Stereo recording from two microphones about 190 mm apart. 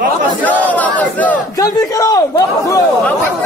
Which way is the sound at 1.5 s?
20° left (ahead or behind).